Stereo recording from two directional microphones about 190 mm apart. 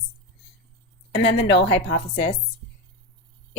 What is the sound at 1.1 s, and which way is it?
Speech, 65° left (ahead or behind).